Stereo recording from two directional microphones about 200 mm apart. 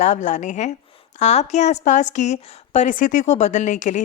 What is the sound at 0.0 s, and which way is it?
A woman's voice, 35° left (ahead or behind).